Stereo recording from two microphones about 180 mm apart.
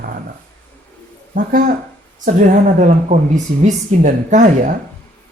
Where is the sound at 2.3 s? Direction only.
45° right (ahead or behind).